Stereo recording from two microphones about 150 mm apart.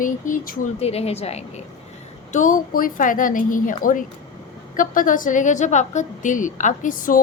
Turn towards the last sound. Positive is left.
turn(degrees=60)  # may be behind; listen again after turning